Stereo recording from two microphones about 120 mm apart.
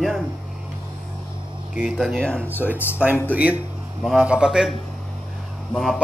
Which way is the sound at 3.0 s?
10° right (ahead or behind).